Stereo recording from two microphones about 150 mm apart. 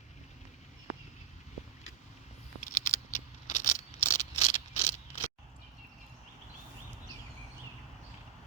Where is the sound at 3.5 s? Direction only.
55° left (ahead or behind).